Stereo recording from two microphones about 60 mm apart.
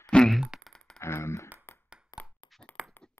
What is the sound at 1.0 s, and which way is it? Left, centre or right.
Speech, left.